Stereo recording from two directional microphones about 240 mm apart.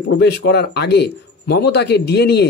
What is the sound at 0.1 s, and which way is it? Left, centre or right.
A man's voice, left.